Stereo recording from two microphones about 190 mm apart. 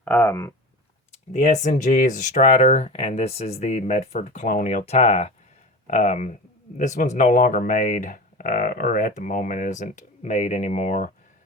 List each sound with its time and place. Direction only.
0.0 s speech: 10° left (ahead or behind)
1.3 s speech: 40° left (ahead or behind)